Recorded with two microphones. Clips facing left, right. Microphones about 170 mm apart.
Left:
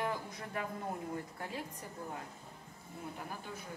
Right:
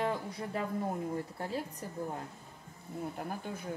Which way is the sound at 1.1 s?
35° right (ahead or behind).